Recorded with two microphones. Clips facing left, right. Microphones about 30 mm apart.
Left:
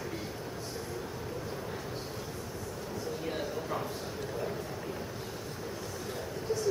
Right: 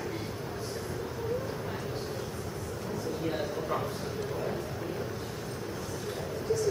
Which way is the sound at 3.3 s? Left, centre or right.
Centre.